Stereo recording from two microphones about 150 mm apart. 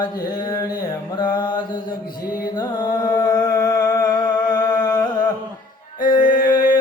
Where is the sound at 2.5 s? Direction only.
30° left (ahead or behind).